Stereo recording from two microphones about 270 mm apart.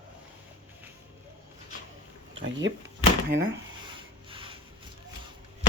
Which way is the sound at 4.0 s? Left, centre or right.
Centre.